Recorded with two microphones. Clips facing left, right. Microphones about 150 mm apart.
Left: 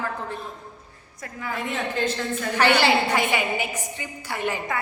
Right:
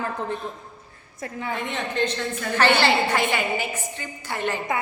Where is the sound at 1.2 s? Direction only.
25° right (ahead or behind).